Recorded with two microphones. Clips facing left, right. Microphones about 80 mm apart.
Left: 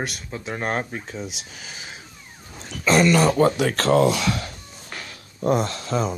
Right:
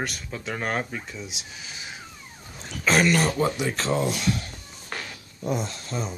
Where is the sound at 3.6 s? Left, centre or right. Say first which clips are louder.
Left 7 dB; left.